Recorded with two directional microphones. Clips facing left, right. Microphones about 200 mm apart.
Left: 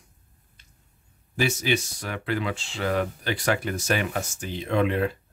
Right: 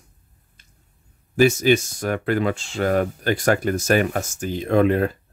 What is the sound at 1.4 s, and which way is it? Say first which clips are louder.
Speech: right 9 dB; 45° right (ahead or behind).